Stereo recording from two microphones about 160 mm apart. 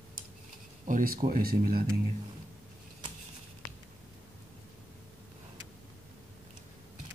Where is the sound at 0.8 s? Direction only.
60° right (ahead or behind).